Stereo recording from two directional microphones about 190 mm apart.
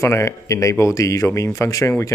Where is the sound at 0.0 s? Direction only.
15° left (ahead or behind).